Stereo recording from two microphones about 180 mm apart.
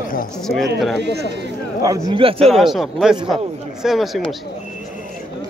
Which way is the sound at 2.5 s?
Centre (ahead or behind).